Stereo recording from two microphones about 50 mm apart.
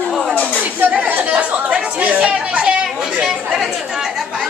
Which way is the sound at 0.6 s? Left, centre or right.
Right.